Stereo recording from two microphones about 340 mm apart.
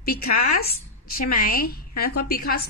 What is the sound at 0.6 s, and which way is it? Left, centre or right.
A woman's voice, left.